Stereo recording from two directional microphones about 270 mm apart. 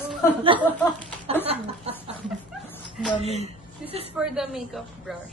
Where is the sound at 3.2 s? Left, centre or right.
Right.